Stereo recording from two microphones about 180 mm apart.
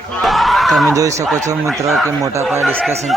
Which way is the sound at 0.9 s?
15° right (ahead or behind).